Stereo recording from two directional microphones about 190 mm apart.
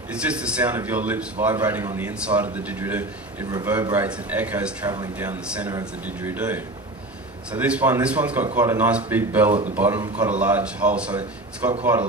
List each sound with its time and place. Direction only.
0.1 s a man's voice: 5° right (ahead or behind)
4.8 s speech: 20° right (ahead or behind)
6.0 s a man's voice: 10° right (ahead or behind)